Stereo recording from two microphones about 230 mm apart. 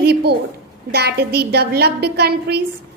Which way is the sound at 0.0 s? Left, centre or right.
Right.